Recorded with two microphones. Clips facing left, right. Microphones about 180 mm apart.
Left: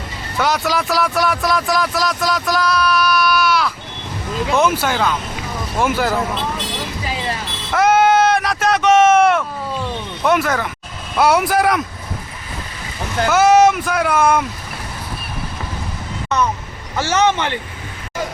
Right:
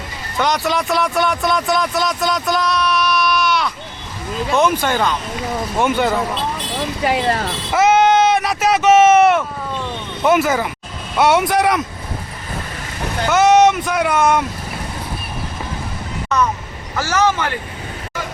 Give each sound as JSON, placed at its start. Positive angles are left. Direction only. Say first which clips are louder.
{"t": 0.3, "sound": "speech", "louder": "even", "side_deg": 5}
{"t": 7.0, "sound": "speech", "louder": "right 9 dB", "side_deg": -65}
{"t": 7.7, "sound": "speech", "louder": "even", "side_deg": 0}
{"t": 13.3, "sound": "speech", "louder": "even", "side_deg": 0}
{"t": 17.0, "sound": "speech", "louder": "left 1 dB", "side_deg": 25}